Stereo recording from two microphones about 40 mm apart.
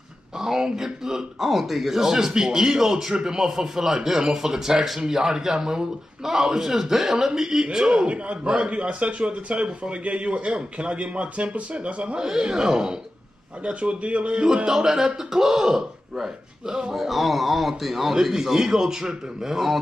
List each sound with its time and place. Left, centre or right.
0.4 s speech: centre
7.7 s a man's voice: right
12.3 s speech: centre
13.7 s speech: right
14.7 s speech: centre